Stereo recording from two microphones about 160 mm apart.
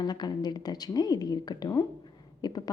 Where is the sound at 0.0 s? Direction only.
25° left (ahead or behind).